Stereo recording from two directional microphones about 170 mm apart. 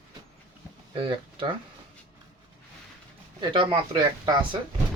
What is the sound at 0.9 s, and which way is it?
Speech, 30° right (ahead or behind).